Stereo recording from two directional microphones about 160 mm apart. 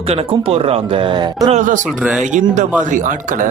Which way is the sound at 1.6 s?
50° right (ahead or behind).